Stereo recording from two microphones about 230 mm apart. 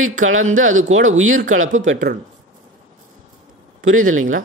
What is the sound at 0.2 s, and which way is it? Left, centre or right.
A man's voice, right.